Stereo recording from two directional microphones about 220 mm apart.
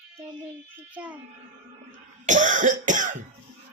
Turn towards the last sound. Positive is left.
turn(degrees=-35)  # may be behind; listen again after turning